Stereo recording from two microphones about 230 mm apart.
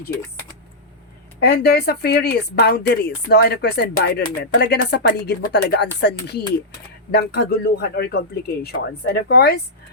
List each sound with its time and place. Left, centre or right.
1.4 s speech: left